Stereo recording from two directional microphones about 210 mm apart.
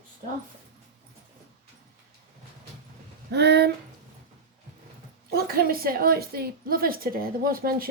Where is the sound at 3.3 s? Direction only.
50° right (ahead or behind).